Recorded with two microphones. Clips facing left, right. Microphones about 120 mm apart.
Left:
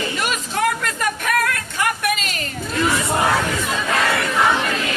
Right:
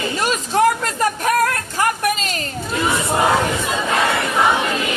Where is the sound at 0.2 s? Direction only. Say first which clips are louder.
Right 7 dB; 35° right (ahead or behind).